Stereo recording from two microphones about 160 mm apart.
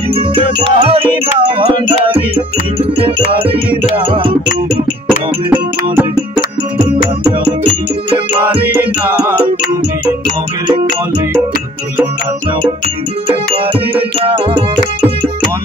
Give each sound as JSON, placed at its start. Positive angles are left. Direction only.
{"t": 0.1, "sound": "music", "side_deg": -35}
{"t": 5.5, "sound": "music", "side_deg": -10}
{"t": 8.7, "sound": "music", "side_deg": -15}
{"t": 14.2, "sound": "music", "side_deg": -30}